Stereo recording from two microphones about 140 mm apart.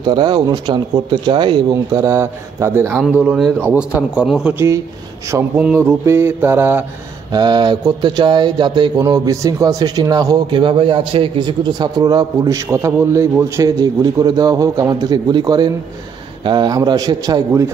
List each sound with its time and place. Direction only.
0.0 s speech: 35° right (ahead or behind)
1.7 s speech: 20° right (ahead or behind)
3.0 s speech: 5° right (ahead or behind)
3.5 s mantra: 10° right (ahead or behind)
7.3 s speech: 30° right (ahead or behind)